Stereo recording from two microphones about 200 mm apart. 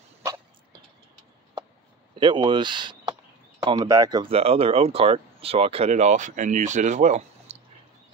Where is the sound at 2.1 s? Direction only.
25° right (ahead or behind).